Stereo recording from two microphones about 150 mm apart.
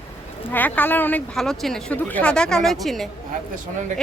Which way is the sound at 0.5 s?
10° left (ahead or behind).